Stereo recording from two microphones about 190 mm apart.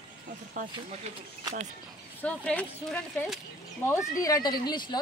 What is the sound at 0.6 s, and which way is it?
Speech, 45° right (ahead or behind).